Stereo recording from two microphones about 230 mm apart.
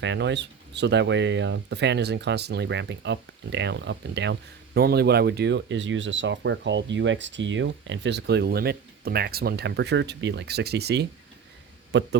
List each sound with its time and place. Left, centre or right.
0.0 s speech: right